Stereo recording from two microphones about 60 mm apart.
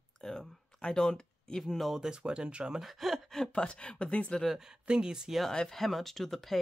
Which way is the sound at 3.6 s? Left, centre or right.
Centre.